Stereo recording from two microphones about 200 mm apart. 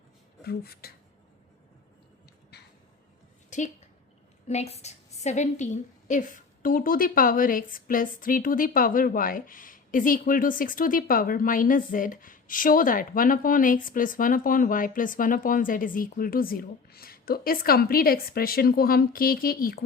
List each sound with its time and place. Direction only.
0.4 s a woman's voice: 50° left (ahead or behind)
3.5 s a sound: 35° left (ahead or behind)
4.4 s a woman's voice: 35° left (ahead or behind)